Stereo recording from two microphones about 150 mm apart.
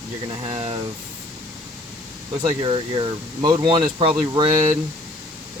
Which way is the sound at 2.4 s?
35° right (ahead or behind).